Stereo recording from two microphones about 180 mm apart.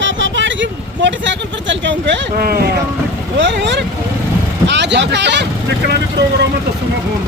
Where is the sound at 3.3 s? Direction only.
85° right.